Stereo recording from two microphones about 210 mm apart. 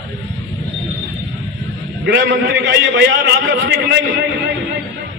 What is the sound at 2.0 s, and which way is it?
A man's voice, 55° right (ahead or behind).